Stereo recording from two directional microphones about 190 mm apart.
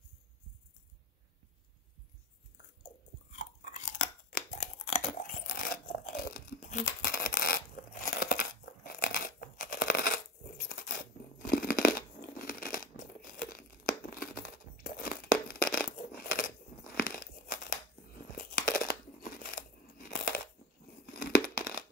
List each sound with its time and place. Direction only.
3.3 s chewing: 40° left (ahead or behind)
4.9 s crunch: 40° left (ahead or behind)
8.1 s crumpling: 55° left (ahead or behind)
10.7 s scissors: 55° left (ahead or behind)
14.0 s tearing: 50° left (ahead or behind)
16.0 s biting: 50° left (ahead or behind)
18.3 s crunch: 50° left (ahead or behind)
21.0 s a sound: 55° left (ahead or behind)